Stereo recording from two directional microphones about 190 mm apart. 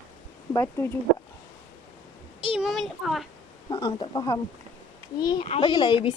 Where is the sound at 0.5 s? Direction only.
15° left (ahead or behind).